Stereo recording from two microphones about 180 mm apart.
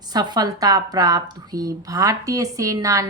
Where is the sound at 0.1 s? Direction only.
20° right (ahead or behind).